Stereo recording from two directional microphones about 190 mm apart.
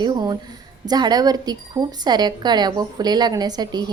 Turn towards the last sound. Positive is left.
turn(degrees=-20)  # may be behind; listen again after turning